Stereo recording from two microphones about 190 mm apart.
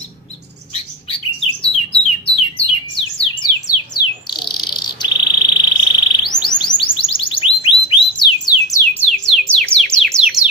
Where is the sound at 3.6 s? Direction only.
20° left (ahead or behind).